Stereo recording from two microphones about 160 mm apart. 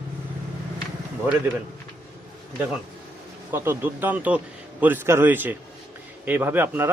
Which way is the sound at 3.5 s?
15° right (ahead or behind).